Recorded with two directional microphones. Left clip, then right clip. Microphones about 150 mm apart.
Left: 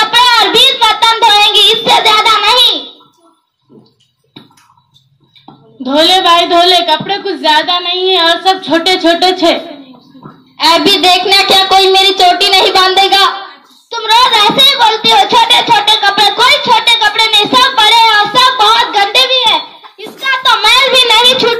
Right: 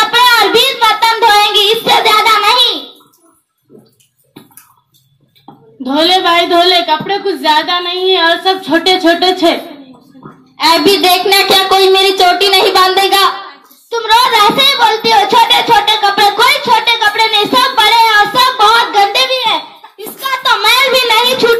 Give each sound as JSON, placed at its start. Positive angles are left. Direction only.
{"t": 0.0, "sound": "child singing", "side_deg": 25}
{"t": 5.8, "sound": "a child's voice", "side_deg": 25}